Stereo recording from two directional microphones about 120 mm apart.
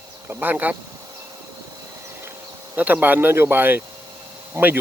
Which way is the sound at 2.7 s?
15° right (ahead or behind).